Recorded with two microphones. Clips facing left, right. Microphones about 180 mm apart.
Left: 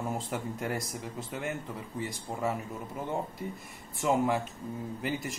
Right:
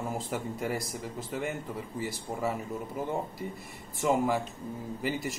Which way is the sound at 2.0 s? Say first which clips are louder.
Even; centre (ahead or behind).